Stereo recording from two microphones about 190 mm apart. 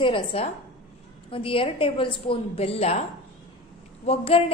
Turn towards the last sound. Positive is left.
turn(degrees=30)  # may be behind; listen again after turning